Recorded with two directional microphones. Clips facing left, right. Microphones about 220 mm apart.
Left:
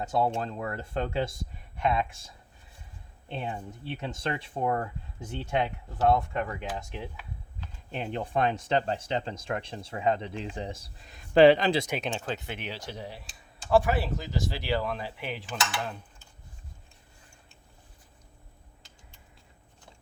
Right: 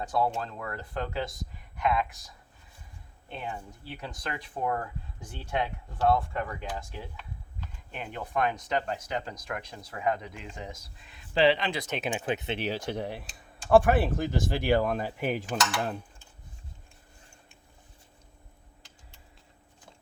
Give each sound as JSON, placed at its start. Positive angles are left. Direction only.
{"t": 0.0, "sound": "speech", "side_deg": 25}
{"t": 7.9, "sound": "speech", "side_deg": 30}
{"t": 12.1, "sound": "speech", "side_deg": -15}
{"t": 12.5, "sound": "speech", "side_deg": -45}